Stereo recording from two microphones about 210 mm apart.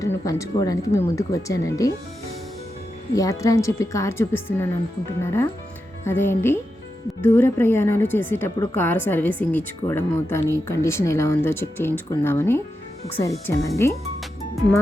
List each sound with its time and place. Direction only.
0.3 s speech: 15° left (ahead or behind)
3.2 s speech: 15° left (ahead or behind)